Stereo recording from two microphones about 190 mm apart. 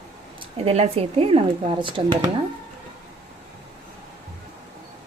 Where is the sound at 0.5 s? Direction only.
30° right (ahead or behind).